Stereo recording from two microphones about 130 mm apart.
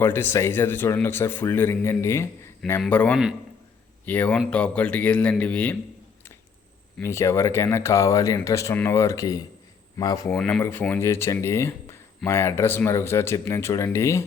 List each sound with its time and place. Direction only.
0.0 s a man's voice: 15° left (ahead or behind)
7.0 s speech: 20° left (ahead or behind)
10.2 s a man's voice: 5° left (ahead or behind)